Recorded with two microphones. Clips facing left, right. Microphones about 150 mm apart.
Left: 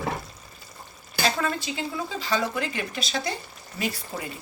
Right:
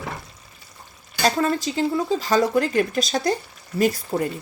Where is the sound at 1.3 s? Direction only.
40° right (ahead or behind).